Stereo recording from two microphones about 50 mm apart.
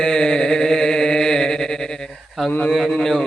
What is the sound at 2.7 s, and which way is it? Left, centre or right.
Speech, centre.